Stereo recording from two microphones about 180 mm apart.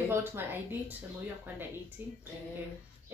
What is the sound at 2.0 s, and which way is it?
Speech, 10° right (ahead or behind).